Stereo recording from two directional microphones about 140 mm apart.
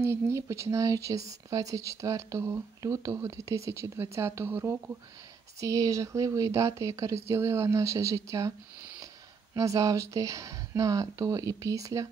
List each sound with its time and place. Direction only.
0.0 s speech: 20° right (ahead or behind)